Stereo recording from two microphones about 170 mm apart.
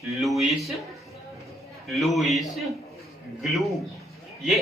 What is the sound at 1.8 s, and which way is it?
A man's voice, centre (ahead or behind).